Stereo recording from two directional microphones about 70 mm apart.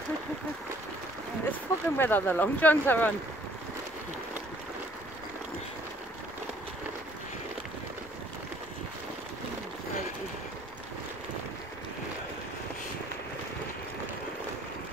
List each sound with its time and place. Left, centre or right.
1.5 s speech: left